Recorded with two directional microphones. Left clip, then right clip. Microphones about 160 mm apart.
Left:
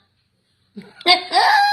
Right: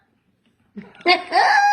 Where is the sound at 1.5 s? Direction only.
40° left (ahead or behind).